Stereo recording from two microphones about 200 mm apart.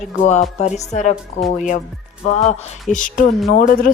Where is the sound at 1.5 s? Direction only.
40° left (ahead or behind).